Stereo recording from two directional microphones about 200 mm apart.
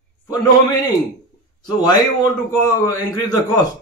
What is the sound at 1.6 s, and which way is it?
Speech, 20° left (ahead or behind).